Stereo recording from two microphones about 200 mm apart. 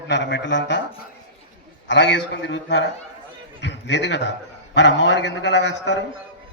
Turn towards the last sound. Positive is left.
turn(degrees=60)  # may be behind; listen again after turning